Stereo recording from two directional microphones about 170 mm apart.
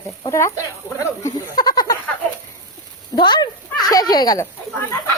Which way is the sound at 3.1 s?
25° left (ahead or behind).